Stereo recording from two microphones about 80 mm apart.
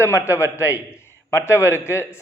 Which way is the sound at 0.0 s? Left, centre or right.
Left.